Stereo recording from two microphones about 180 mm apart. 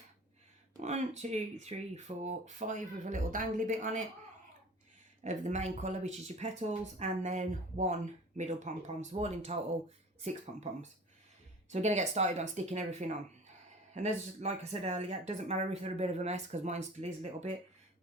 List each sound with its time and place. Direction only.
0.8 s speech: 40° right (ahead or behind)
5.2 s speech: 40° right (ahead or behind)
10.7 s speech: 40° right (ahead or behind)